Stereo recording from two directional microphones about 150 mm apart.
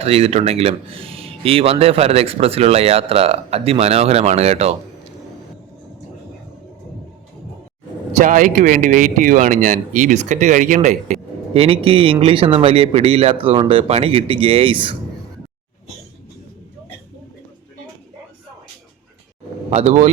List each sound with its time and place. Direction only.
0.0 s speech: 40° right (ahead or behind)
8.2 s speech: 65° right (ahead or behind)
10.8 s speech: 45° right (ahead or behind)
19.7 s speech: 50° right (ahead or behind)